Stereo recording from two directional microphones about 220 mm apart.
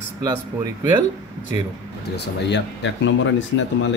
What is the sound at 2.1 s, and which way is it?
Speech, 50° left (ahead or behind).